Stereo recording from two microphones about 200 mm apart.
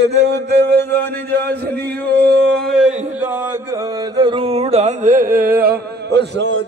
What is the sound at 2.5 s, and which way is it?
Speech, 5° right (ahead or behind).